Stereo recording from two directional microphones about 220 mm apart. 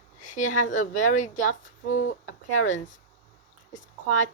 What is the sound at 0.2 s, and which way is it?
A woman's voice, 35° left (ahead or behind).